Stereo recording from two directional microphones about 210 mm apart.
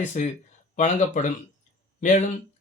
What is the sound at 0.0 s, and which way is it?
A man's voice, 35° left (ahead or behind).